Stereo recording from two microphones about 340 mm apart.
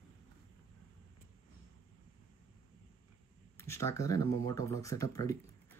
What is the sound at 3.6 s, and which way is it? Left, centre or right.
Speech, centre.